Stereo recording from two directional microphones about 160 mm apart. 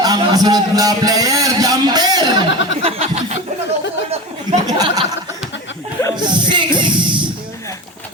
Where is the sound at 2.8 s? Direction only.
40° right (ahead or behind).